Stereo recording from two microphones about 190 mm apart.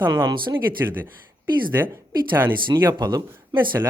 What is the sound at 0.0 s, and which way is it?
Speech, 20° right (ahead or behind).